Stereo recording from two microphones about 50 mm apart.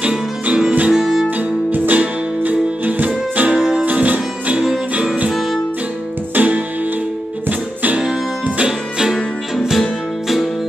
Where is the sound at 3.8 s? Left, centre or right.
Right.